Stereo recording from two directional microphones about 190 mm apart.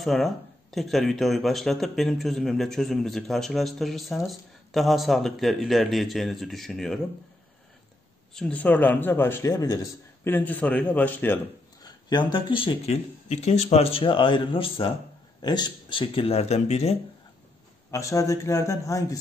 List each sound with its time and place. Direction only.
0.0 s speech: centre (ahead or behind)
8.4 s speech: 5° left (ahead or behind)
11.8 s speech: 20° left (ahead or behind)
17.9 s speech: 15° left (ahead or behind)